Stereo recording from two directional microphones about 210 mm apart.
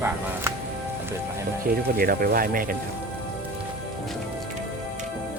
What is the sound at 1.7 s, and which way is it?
Speech, 45° right (ahead or behind).